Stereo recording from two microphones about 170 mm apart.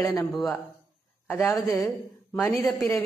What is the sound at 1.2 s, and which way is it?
A woman's voice, 15° left (ahead or behind).